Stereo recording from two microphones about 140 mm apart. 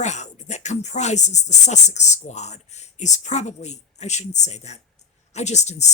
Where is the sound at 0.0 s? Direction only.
55° left (ahead or behind).